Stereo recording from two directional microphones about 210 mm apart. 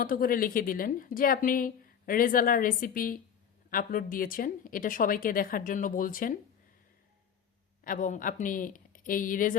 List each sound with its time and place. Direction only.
0.0 s a woman's voice: 40° left (ahead or behind)
7.9 s a woman's voice: 40° left (ahead or behind)